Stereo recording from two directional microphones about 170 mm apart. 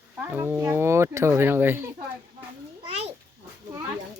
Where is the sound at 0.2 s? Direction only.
10° right (ahead or behind).